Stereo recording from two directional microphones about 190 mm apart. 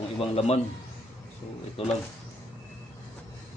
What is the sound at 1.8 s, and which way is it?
Speech, 30° left (ahead or behind).